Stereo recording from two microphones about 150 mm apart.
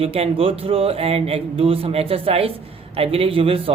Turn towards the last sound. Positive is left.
turn(degrees=-40)  # may be behind; listen again after turning